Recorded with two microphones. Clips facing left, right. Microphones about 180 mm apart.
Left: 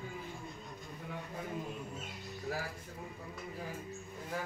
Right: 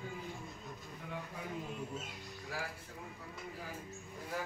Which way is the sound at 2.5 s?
40° left (ahead or behind).